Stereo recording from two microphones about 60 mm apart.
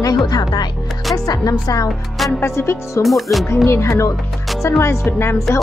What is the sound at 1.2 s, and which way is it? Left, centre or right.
Speech, left.